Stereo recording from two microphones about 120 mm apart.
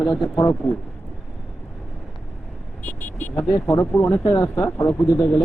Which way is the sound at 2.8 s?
15° left (ahead or behind).